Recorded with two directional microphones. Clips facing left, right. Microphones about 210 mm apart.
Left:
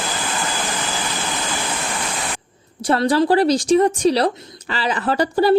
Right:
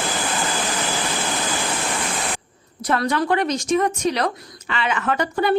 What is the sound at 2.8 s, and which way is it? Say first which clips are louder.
A woman's voice: left 5 dB; 30° left (ahead or behind).